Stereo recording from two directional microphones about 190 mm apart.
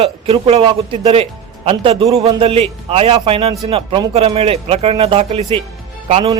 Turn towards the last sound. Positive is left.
turn(degrees=-35)  # may be behind; listen again after turning